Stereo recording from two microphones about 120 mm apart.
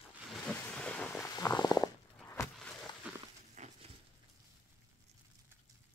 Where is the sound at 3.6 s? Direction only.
80° right.